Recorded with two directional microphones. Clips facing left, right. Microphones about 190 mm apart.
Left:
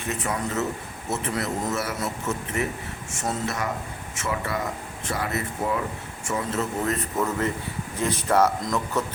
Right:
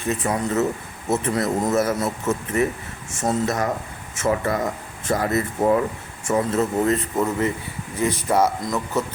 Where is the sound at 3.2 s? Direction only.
40° right (ahead or behind).